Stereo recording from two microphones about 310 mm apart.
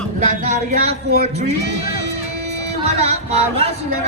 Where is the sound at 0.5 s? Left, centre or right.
Right.